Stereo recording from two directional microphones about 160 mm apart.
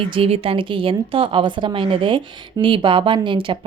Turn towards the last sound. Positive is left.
turn(degrees=-30)  # may be behind; listen again after turning